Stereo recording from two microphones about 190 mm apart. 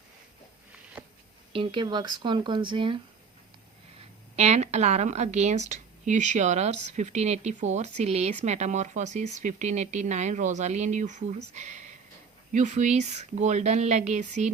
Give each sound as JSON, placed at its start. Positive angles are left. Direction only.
{"t": 1.5, "sound": "speech", "side_deg": -25}
{"t": 4.4, "sound": "a woman's voice", "side_deg": -35}